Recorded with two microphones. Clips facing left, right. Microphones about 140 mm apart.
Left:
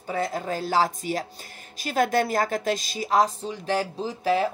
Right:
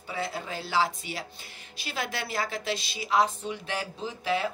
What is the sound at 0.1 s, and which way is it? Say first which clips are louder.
A woman's voice: left 6 dB; 45° left (ahead or behind).